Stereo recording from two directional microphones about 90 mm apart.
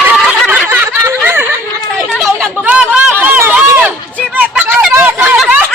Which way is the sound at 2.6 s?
10° right (ahead or behind).